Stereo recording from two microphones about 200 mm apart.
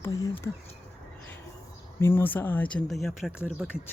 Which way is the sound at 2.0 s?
10° left (ahead or behind).